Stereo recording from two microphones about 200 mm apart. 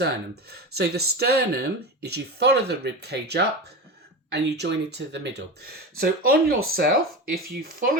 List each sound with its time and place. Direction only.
0.5 s speech: 55° right (ahead or behind)